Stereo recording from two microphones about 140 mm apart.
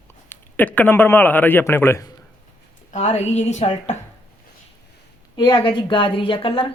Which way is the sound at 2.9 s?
50° left (ahead or behind).